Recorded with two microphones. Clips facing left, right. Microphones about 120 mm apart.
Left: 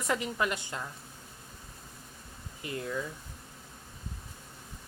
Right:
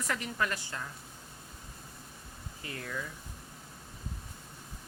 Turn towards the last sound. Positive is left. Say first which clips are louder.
# left 5 dB
turn(degrees=20)  # may be behind; listen again after turning